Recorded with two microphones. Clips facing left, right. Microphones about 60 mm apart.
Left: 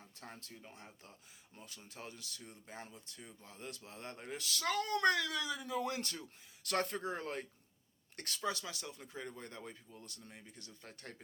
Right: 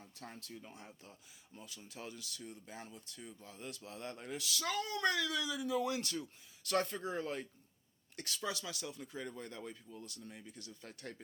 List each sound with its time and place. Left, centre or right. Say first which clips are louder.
0.0 s a sound: right 1 dB; left
0.7 s speech: right 1 dB; left
4.4 s speech: left 2 dB; left
6.7 s speech: right 1 dB; left
8.4 s speech: left 2 dB; left